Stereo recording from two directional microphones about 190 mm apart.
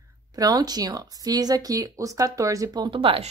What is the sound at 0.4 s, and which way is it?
Speech, 20° right (ahead or behind).